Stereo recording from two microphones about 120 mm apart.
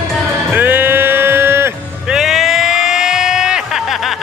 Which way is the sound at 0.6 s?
15° right (ahead or behind).